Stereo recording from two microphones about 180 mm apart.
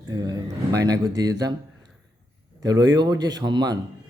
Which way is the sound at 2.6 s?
20° right (ahead or behind).